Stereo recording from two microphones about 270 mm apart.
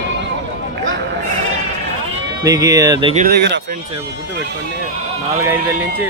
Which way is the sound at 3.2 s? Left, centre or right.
Right.